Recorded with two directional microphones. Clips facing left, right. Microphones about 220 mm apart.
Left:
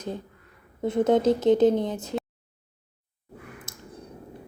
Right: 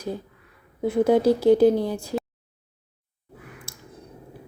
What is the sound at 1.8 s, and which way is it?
Speech, 20° left (ahead or behind).